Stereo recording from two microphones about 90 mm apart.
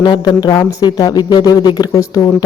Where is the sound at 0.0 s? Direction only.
55° left (ahead or behind).